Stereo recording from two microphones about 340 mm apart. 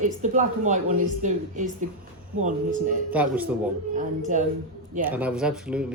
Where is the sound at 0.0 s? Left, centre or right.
Right.